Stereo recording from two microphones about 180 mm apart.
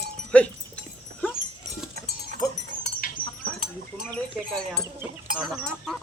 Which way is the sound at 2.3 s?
45° right (ahead or behind).